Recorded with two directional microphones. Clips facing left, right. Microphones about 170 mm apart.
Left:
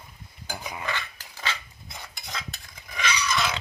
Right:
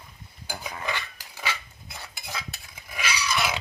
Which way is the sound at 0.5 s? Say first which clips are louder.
Left 1 dB; 10° left (ahead or behind).